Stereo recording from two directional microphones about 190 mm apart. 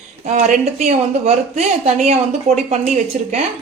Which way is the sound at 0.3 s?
40° right (ahead or behind).